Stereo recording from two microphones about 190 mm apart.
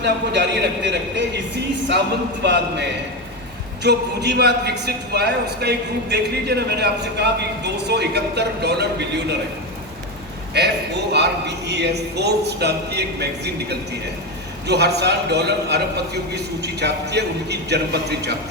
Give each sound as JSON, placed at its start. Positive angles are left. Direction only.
{"t": 0.0, "sound": "a man's voice", "side_deg": -65}
{"t": 2.4, "sound": "a man's voice", "side_deg": -65}
{"t": 3.8, "sound": "a man's voice", "side_deg": -60}
{"t": 10.5, "sound": "a man's voice", "side_deg": -60}